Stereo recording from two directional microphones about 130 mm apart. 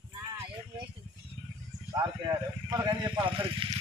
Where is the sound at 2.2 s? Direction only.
30° right (ahead or behind).